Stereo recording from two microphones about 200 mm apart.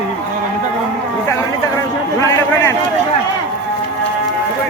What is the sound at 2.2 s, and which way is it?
Speech, 15° left (ahead or behind).